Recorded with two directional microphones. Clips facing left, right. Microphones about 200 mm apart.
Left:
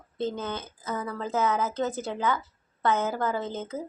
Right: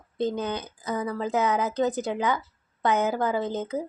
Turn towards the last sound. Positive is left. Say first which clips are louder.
# right 4 dB
turn(degrees=-15)  # may be behind; listen again after turning